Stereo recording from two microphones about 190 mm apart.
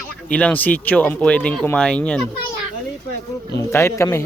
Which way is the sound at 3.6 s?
15° left (ahead or behind).